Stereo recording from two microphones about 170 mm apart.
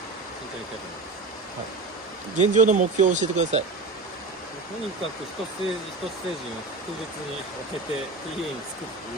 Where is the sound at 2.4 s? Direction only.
45° right (ahead or behind).